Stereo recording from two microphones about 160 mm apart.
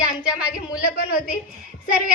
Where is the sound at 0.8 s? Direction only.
65° left (ahead or behind).